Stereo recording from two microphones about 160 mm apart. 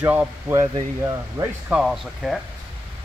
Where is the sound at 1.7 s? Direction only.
5° right (ahead or behind).